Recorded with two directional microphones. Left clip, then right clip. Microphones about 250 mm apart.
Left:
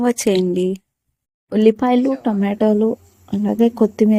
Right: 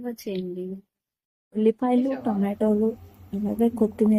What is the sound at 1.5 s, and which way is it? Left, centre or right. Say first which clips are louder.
A woman's voice: left 8 dB; left.